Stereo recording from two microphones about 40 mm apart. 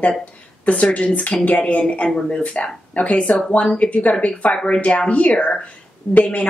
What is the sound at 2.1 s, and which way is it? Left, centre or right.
A woman's voice, left.